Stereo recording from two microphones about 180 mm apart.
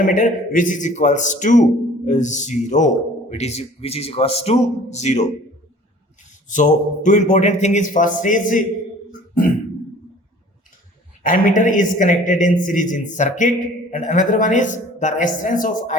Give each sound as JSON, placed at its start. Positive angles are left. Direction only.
{"t": 0.0, "sound": "a man's voice", "side_deg": 50}
{"t": 6.5, "sound": "a man's voice", "side_deg": 45}
{"t": 11.2, "sound": "a man's voice", "side_deg": 45}